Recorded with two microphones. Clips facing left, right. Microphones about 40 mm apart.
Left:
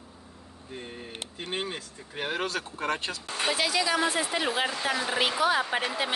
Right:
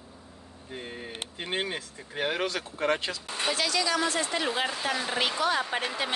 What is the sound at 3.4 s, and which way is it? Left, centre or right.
Speech, centre.